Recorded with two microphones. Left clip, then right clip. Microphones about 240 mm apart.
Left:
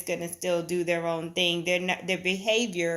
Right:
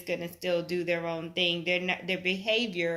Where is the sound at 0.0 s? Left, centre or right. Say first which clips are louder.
Left 2 dB; left.